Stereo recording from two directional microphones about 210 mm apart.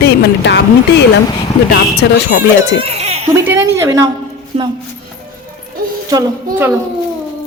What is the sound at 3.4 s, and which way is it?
Speech, 15° right (ahead or behind).